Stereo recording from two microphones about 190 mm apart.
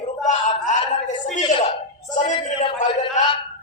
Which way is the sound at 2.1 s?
30° left (ahead or behind).